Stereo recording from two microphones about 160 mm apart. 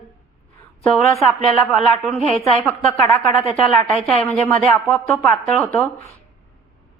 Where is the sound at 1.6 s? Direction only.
5° left (ahead or behind).